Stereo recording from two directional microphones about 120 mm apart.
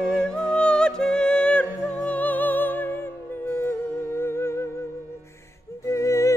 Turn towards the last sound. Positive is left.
turn(degrees=25)  # may be behind; listen again after turning